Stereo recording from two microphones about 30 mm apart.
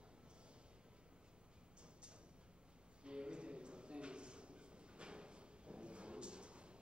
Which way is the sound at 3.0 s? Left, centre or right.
Right.